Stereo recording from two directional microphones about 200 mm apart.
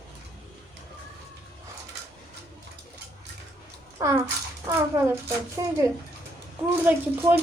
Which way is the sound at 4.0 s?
15° right (ahead or behind).